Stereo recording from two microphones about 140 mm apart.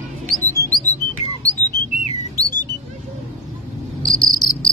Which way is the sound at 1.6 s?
30° right (ahead or behind).